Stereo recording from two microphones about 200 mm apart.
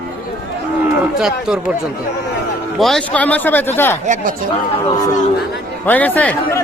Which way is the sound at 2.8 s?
Centre (ahead or behind).